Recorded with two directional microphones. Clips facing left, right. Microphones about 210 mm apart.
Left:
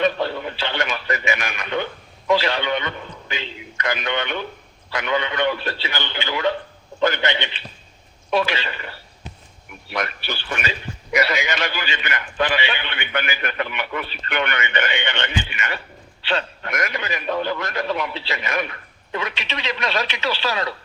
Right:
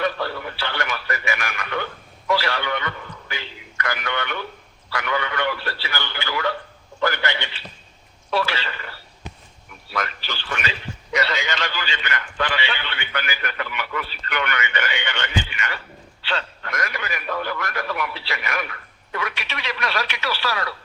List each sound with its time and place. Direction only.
0.0 s a man's voice: 20° left (ahead or behind)